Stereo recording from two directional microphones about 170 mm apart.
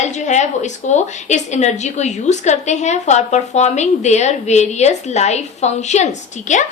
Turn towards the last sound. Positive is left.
turn(degrees=45)  # may be behind; listen again after turning